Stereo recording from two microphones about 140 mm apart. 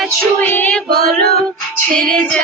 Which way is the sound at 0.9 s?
90° right.